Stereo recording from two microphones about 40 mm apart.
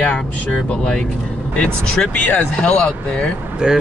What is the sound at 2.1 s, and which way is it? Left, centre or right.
Speech, left.